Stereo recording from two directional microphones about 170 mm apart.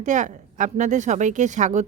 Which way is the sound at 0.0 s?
45° right (ahead or behind).